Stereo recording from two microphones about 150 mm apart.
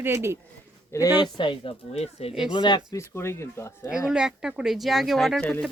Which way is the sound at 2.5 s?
30° left (ahead or behind).